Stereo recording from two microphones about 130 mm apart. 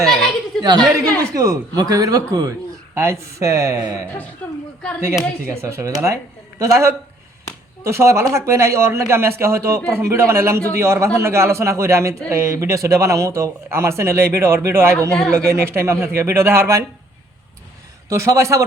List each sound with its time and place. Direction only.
0.0 s a sound: centre (ahead or behind)
0.6 s a woman's voice: 30° right (ahead or behind)
4.4 s a woman's voice: 10° left (ahead or behind)
5.5 s a man's voice: 20° right (ahead or behind)
18.1 s a man's voice: 25° right (ahead or behind)